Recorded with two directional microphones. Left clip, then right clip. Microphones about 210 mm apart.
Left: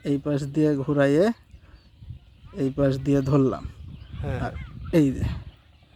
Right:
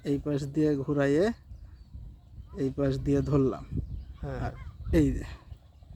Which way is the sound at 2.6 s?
40° left (ahead or behind).